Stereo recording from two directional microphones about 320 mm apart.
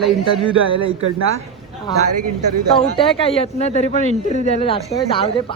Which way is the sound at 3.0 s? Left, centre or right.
Centre.